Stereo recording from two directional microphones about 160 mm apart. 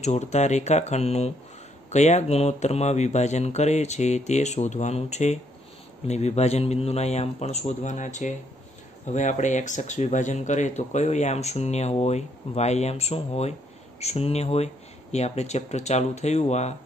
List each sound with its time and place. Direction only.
0.0 s speech: 45° left (ahead or behind)